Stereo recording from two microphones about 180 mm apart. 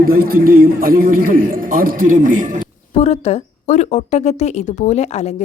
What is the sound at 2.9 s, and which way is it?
Speech, 35° left (ahead or behind).